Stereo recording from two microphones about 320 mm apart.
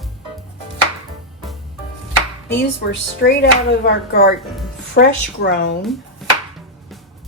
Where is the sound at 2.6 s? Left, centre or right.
Left.